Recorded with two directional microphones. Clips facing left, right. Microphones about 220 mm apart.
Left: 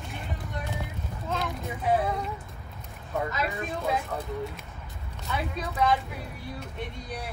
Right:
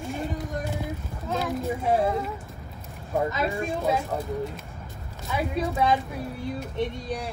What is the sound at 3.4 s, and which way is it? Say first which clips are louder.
Speech: right 4 dB; 30° right (ahead or behind).